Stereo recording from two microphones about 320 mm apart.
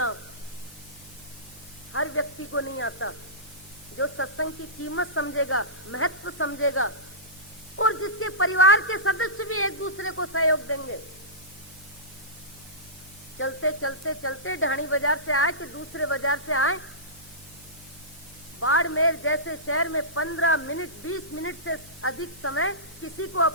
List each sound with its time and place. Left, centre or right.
1.9 s a woman's voice: left
13.4 s a woman's voice: left
18.6 s a woman's voice: left